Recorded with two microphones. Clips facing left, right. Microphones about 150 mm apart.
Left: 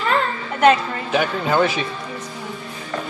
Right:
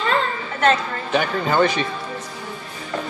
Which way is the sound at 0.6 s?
5° left (ahead or behind).